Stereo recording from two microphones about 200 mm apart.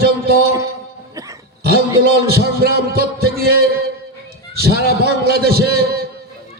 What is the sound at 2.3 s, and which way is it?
A man's voice, 50° right (ahead or behind).